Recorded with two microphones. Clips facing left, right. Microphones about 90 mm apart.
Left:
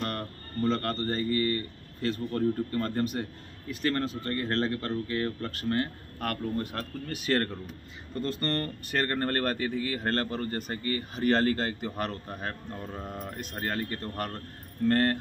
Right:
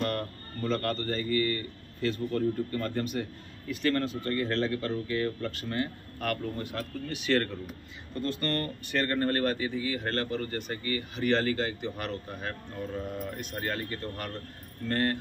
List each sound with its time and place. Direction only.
0.7 s speech: 35° left (ahead or behind)